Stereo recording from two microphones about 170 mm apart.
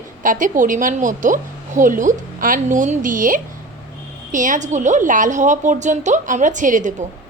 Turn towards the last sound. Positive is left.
turn(degrees=-50)  # may be behind; listen again after turning